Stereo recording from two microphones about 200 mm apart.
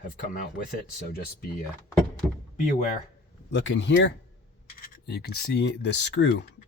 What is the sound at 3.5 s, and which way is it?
Speech, 65° left (ahead or behind).